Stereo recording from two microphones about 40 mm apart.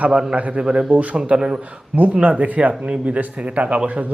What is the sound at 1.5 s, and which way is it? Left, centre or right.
Speech, right.